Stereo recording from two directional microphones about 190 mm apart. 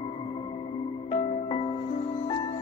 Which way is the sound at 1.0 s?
30° left (ahead or behind).